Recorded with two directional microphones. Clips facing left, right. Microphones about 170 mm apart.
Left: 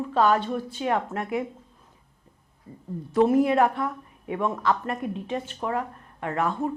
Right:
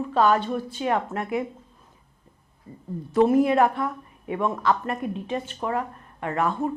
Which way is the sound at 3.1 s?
25° right (ahead or behind).